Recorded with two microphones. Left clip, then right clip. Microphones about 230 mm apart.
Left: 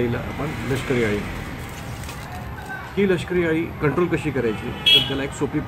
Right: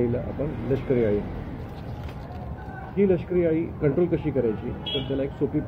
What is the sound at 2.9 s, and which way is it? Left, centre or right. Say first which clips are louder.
Speech: left 1 dB; centre.